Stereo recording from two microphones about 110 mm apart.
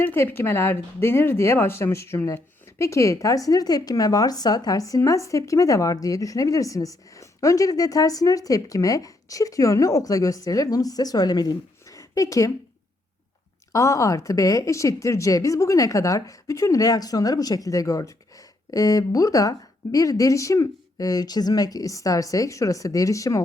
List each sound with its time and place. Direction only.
0.0 s speech: 15° left (ahead or behind)
13.7 s speech: 30° left (ahead or behind)